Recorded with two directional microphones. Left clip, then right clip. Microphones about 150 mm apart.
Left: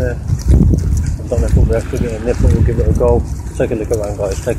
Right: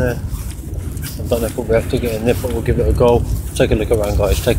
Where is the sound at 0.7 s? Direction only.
5° right (ahead or behind).